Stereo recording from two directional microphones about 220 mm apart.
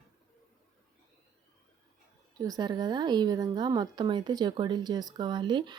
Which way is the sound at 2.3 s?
15° right (ahead or behind).